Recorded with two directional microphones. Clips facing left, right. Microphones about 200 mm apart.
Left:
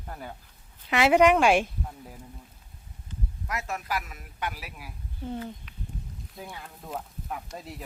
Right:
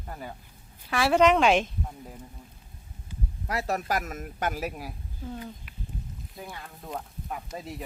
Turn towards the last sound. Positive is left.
turn(degrees=0)  # may be behind; listen again after turning